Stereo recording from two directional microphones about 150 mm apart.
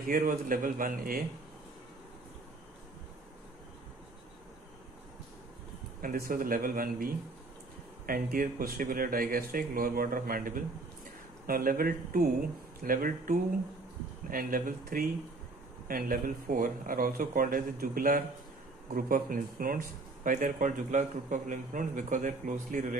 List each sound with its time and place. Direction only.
0.1 s speech: 65° right (ahead or behind)
6.0 s a man's voice: 75° right (ahead or behind)
8.1 s a man's voice: 70° right (ahead or behind)